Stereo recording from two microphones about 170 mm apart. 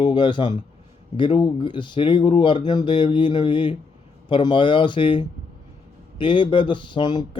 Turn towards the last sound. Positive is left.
turn(degrees=25)  # may be behind; listen again after turning